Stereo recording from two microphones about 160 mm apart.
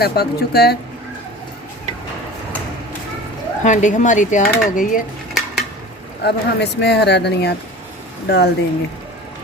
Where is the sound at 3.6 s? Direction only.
50° left (ahead or behind).